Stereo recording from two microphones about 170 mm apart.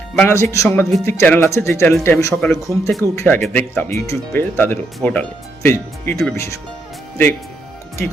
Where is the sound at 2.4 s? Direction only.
Centre (ahead or behind).